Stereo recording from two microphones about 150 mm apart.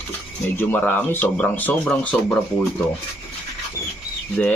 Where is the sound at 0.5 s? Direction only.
15° left (ahead or behind).